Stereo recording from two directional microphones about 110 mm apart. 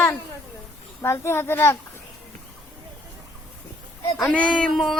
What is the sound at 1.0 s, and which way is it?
Speech, 25° left (ahead or behind).